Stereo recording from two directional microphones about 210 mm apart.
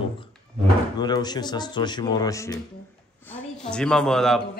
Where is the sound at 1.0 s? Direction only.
20° left (ahead or behind).